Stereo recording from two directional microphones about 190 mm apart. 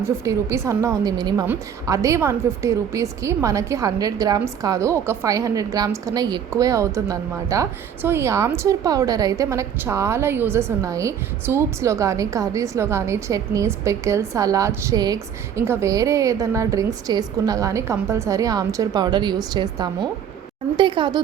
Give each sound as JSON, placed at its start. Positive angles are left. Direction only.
{"t": 0.3, "sound": "a woman's voice", "side_deg": -15}